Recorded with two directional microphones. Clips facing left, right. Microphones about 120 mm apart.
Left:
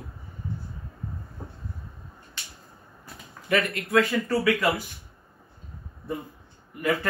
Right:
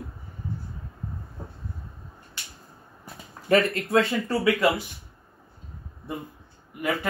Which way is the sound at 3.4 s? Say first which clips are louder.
Right 4 dB; 30° right (ahead or behind).